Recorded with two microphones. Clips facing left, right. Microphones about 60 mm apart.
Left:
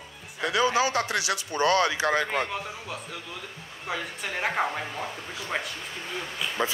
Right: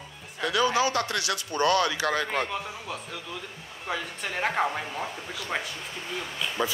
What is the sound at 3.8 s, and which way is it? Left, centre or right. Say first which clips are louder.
A woman's voice: even; centre.